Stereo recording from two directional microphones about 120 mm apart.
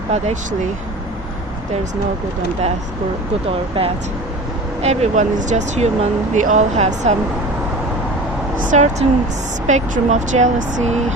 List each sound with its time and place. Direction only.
0.1 s speech: 70° right (ahead or behind)
3.8 s speech: 50° right (ahead or behind)
4.8 s speech: 65° right (ahead or behind)
8.5 s speech: 90° right